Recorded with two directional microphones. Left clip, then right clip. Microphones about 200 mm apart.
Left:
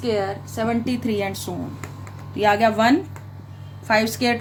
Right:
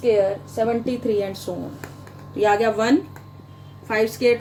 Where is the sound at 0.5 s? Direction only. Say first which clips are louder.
Even; 50° left (ahead or behind).